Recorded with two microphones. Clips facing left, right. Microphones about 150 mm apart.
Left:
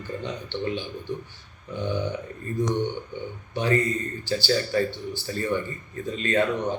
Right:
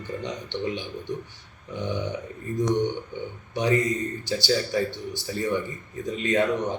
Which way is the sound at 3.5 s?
15° right (ahead or behind).